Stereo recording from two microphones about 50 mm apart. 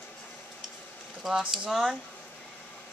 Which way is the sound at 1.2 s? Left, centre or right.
Centre.